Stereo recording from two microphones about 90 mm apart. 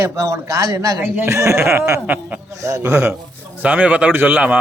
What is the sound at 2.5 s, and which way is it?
Speech, 35° right (ahead or behind).